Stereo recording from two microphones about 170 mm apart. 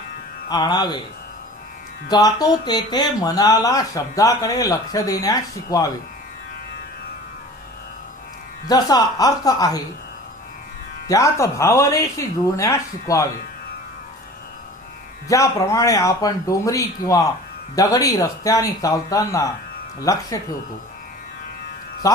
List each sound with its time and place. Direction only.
0.4 s speech: 25° left (ahead or behind)
2.0 s speech: 25° left (ahead or behind)
8.6 s speech: 25° left (ahead or behind)
11.1 s speech: 20° left (ahead or behind)
15.3 s speech: 20° left (ahead or behind)
22.0 s speech: 20° left (ahead or behind)